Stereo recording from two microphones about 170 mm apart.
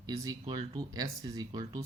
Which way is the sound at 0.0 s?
20° right (ahead or behind).